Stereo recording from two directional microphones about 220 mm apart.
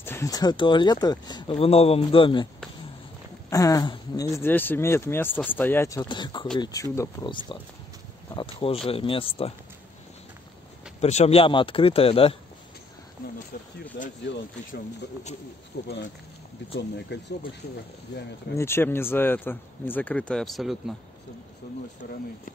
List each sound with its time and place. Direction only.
0.0 s speech: 10° left (ahead or behind)
3.4 s speech: 15° left (ahead or behind)
11.0 s speech: 30° left (ahead or behind)
14.2 s speech: 50° left (ahead or behind)
17.1 s speech: 50° left (ahead or behind)
18.6 s speech: 10° left (ahead or behind)
22.0 s speech: 40° left (ahead or behind)